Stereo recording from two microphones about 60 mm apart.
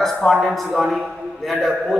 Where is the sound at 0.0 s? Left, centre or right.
Centre.